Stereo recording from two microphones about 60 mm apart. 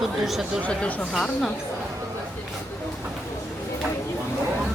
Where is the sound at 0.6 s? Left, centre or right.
Left.